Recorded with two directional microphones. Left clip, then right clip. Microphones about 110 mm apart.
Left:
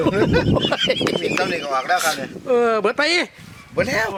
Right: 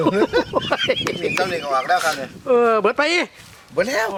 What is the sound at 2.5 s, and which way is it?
Speech, 30° left (ahead or behind).